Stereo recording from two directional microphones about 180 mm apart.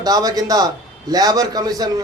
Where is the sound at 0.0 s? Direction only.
20° right (ahead or behind).